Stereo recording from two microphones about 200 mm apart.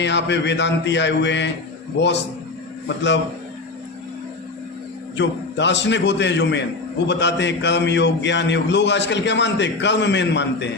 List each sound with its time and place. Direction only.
0.0 s a man's voice: 60° left (ahead or behind)
5.1 s a man's voice: 65° left (ahead or behind)